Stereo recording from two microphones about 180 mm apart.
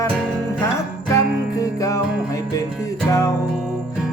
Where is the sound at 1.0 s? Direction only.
15° left (ahead or behind).